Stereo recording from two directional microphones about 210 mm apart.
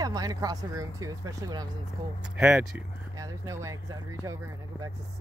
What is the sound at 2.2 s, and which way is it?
Speech, 5° right (ahead or behind).